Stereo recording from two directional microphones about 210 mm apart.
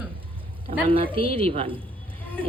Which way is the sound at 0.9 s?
25° right (ahead or behind).